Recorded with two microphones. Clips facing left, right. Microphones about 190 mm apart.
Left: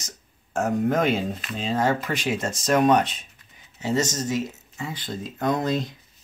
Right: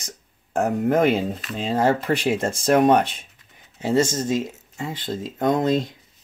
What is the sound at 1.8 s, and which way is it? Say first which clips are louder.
Speech: right 4 dB; 30° right (ahead or behind).